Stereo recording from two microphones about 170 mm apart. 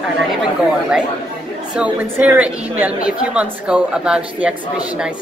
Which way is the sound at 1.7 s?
10° right (ahead or behind).